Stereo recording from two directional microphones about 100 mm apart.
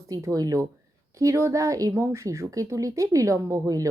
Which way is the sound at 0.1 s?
35° right (ahead or behind).